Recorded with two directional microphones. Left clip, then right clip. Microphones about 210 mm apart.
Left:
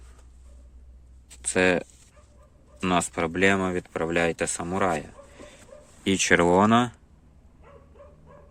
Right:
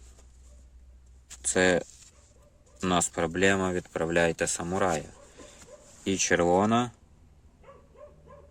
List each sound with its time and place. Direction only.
1.4 s speech: 15° right (ahead or behind)
6.1 s speech: centre (ahead or behind)